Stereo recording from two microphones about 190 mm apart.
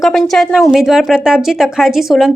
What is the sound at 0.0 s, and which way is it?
A woman's voice, centre (ahead or behind).